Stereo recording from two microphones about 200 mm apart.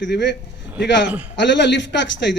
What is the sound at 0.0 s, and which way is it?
A man's voice, 60° left (ahead or behind).